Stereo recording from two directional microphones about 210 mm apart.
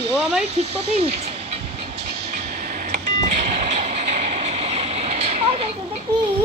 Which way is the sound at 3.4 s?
35° right (ahead or behind).